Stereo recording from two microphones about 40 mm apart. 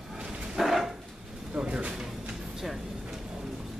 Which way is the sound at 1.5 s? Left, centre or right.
Right.